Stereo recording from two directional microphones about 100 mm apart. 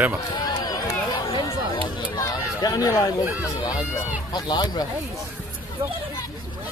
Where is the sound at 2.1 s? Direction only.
40° left (ahead or behind).